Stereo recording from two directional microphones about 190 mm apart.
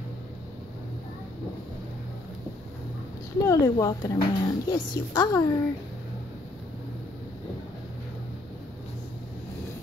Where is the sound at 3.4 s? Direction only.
20° left (ahead or behind).